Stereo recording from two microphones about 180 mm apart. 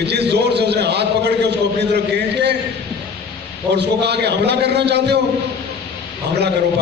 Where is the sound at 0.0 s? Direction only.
65° right (ahead or behind).